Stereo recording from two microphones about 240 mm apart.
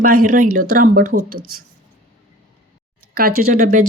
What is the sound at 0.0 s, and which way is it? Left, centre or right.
A woman's voice, right.